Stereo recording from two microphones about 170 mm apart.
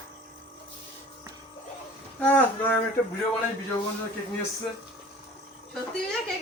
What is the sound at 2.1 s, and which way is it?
Speech, 10° left (ahead or behind).